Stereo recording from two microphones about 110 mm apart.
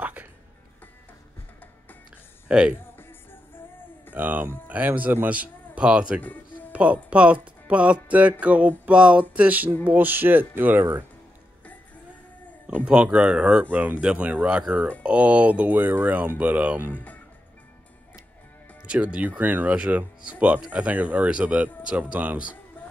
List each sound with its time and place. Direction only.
0.0 s music: 15° right (ahead or behind)
2.4 s speech: 10° right (ahead or behind)
4.1 s speech: 15° right (ahead or behind)
12.6 s speech: 10° right (ahead or behind)
16.9 s speech: 15° left (ahead or behind)
19.1 s speech: 15° right (ahead or behind)